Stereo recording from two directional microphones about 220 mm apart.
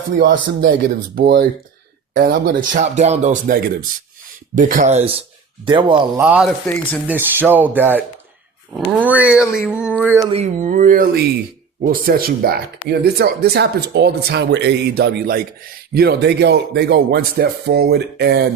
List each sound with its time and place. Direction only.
0.2 s speech: 55° right (ahead or behind); by 6.1 s 20° right (ahead or behind)
6.1 s speech: 5° right (ahead or behind)
10.2 s speech: 30° right (ahead or behind); by 18.4 s 50° right (ahead or behind)